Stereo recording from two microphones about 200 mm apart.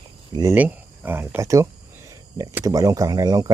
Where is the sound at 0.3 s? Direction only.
10° right (ahead or behind).